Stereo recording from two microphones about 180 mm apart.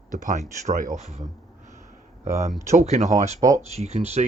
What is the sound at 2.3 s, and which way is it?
Speech, 15° right (ahead or behind).